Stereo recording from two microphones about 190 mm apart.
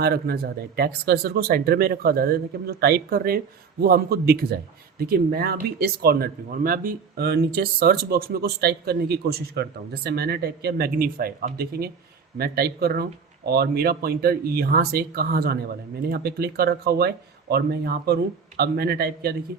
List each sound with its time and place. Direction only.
0.0 s speech: 55° right (ahead or behind)